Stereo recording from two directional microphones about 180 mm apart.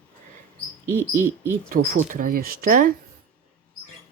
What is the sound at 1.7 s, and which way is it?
Speech, 50° right (ahead or behind).